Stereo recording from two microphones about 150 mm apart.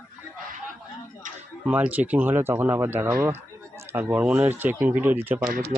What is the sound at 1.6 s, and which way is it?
Speech, 10° right (ahead or behind).